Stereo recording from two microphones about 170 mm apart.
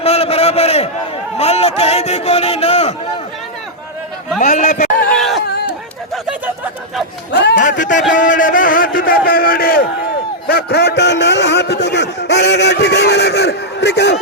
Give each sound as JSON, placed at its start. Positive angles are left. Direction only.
{"t": 0.0, "sound": "a sound", "side_deg": 35}
{"t": 1.4, "sound": "speech", "side_deg": 40}
{"t": 4.4, "sound": "speech", "side_deg": 45}
{"t": 5.0, "sound": "a sound", "side_deg": 5}
{"t": 7.3, "sound": "a man's voice", "side_deg": 90}
{"t": 7.6, "sound": "a man's voice", "side_deg": 50}